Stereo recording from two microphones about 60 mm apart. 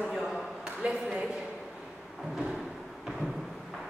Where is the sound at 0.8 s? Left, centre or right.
Right.